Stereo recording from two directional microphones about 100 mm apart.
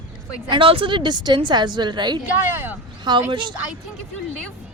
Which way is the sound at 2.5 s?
20° right (ahead or behind).